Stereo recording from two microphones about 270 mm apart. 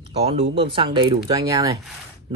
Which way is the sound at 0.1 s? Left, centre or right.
Right.